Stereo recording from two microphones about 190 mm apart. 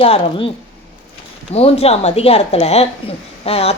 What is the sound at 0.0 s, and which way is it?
Speech, 30° left (ahead or behind).